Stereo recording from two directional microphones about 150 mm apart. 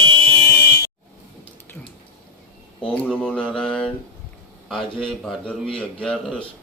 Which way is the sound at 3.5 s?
5° left (ahead or behind).